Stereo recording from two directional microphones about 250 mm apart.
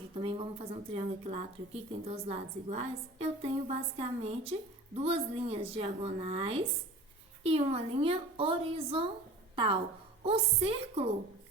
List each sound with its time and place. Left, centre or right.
0.2 s a woman's voice: right
10.2 s a woman's voice: right